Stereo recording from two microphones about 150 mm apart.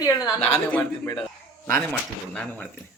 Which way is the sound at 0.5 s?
10° left (ahead or behind).